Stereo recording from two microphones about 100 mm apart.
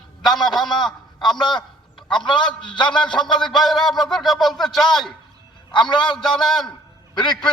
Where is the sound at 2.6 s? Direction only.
50° left (ahead or behind).